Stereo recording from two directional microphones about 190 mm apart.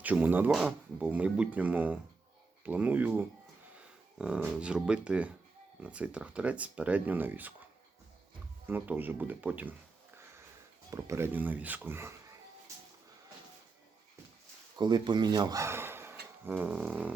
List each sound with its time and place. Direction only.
0.0 s speech: 10° right (ahead or behind)
8.6 s speech: 10° right (ahead or behind)
10.9 s speech: 15° right (ahead or behind)
14.8 s speech: 20° right (ahead or behind); by 17.1 s 5° right (ahead or behind)